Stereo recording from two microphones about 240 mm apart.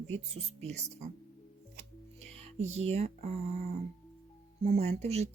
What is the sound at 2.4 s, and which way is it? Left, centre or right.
Speech, right.